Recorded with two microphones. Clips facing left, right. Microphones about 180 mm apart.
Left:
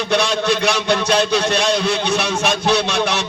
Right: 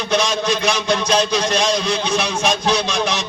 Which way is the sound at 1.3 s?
65° left (ahead or behind).